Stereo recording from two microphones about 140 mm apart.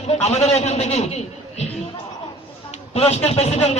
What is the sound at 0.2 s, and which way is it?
Speech, 50° left (ahead or behind).